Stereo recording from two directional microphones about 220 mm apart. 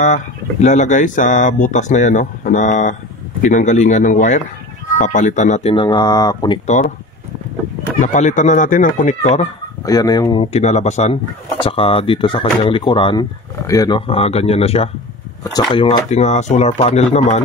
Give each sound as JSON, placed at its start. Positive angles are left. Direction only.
{"t": 0.0, "sound": "speech", "side_deg": 35}
{"t": 6.6, "sound": "speech", "side_deg": 30}
{"t": 8.0, "sound": "speech", "side_deg": 35}
{"t": 9.8, "sound": "speech", "side_deg": 15}